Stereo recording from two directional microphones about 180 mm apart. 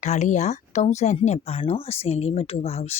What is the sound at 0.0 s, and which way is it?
Speech, 40° left (ahead or behind).